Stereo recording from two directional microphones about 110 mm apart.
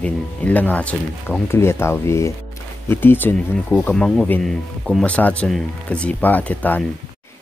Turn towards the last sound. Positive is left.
turn(degrees=15)  # may be behind; listen again after turning